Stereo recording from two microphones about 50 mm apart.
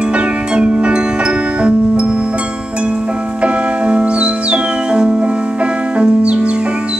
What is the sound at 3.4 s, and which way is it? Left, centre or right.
Music, right.